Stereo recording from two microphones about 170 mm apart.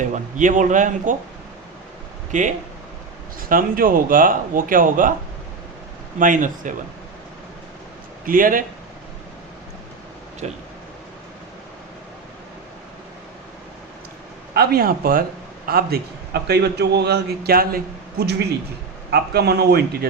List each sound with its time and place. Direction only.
0.0 s a man's voice: 50° right (ahead or behind)
2.3 s a man's voice: 45° right (ahead or behind)
6.1 s a man's voice: 50° right (ahead or behind)
8.2 s speech: 55° right (ahead or behind)
10.4 s speech: 40° right (ahead or behind)
14.5 s a man's voice: 65° right (ahead or behind)